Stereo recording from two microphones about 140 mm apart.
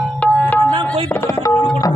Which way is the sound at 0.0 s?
Centre (ahead or behind).